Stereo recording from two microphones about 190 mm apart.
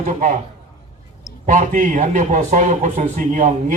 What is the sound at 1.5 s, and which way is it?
A man's voice, 45° right (ahead or behind).